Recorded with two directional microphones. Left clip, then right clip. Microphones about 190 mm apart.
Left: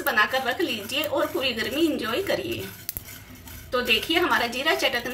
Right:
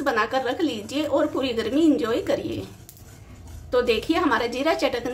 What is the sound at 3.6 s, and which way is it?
A woman's voice, 45° right (ahead or behind).